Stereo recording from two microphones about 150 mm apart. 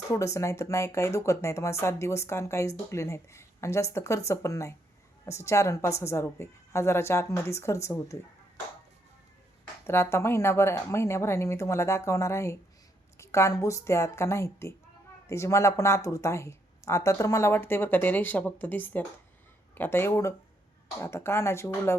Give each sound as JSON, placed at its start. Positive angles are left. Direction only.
{"t": 0.1, "sound": "speech", "side_deg": 20}
{"t": 9.8, "sound": "speech", "side_deg": 15}